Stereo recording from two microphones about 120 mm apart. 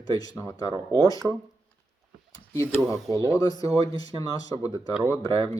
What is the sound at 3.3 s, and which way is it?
Speech, 30° left (ahead or behind).